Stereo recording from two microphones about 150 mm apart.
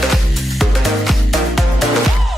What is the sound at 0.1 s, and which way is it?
Music, centre (ahead or behind).